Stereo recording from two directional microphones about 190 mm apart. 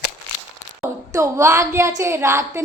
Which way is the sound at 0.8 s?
15° right (ahead or behind).